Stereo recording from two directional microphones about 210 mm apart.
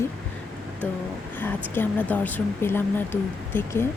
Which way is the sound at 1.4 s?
10° left (ahead or behind).